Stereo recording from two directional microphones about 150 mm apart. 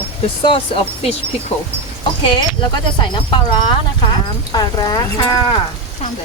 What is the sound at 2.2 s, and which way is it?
Speech, 30° left (ahead or behind).